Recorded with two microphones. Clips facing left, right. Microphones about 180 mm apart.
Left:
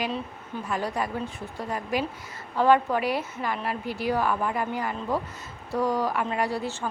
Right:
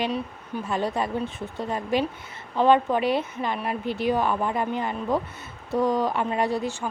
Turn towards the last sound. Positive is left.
turn(degrees=-15)  # may be behind; listen again after turning